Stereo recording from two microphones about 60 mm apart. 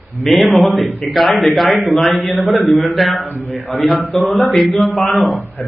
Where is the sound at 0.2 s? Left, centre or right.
Centre.